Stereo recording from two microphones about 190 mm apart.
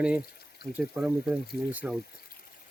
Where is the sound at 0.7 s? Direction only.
5° right (ahead or behind).